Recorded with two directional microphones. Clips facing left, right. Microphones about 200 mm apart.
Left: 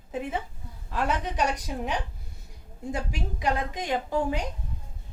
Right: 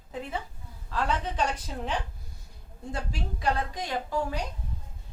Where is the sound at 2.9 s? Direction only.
15° left (ahead or behind).